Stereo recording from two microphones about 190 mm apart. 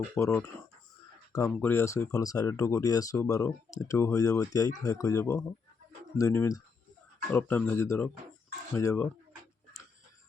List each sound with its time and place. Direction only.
0.2 s speech: 10° left (ahead or behind)
1.5 s speech: 10° left (ahead or behind)